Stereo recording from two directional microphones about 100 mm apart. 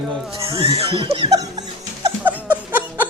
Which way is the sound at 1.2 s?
40° right (ahead or behind).